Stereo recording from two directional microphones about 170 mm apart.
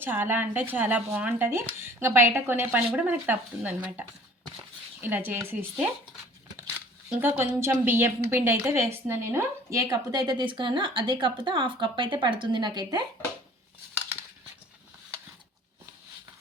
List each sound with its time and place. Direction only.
0.0 s speech: 10° right (ahead or behind)
7.2 s a woman's voice: 10° right (ahead or behind)